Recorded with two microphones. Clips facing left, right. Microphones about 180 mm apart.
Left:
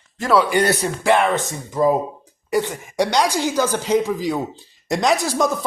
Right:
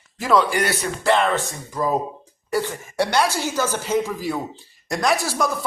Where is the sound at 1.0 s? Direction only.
15° left (ahead or behind).